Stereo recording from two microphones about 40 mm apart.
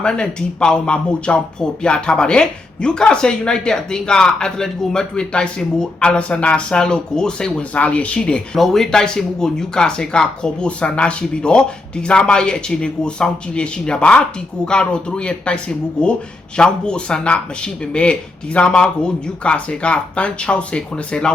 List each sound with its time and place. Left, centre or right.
0.0 s speech: left
7.7 s speech: left
8.5 s speech: centre; by 21.3 s left